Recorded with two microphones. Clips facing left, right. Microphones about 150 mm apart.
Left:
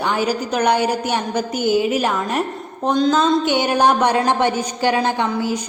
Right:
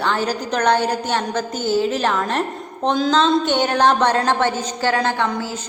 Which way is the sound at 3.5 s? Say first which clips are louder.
Left 1 dB; 10° left (ahead or behind).